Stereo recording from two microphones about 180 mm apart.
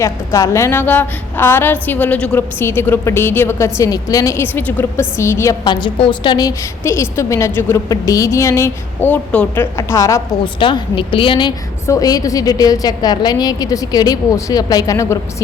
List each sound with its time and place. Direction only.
0.0 s a woman's voice: 15° left (ahead or behind)